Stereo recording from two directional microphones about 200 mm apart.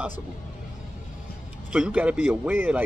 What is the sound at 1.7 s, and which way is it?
Speech, 5° right (ahead or behind).